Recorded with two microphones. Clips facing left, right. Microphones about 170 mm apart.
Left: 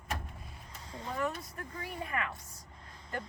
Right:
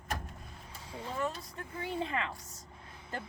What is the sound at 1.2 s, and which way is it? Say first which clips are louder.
A woman's voice: left 1 dB; 25° right (ahead or behind).